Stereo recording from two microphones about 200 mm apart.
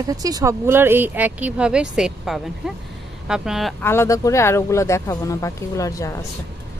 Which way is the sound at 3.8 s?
10° left (ahead or behind).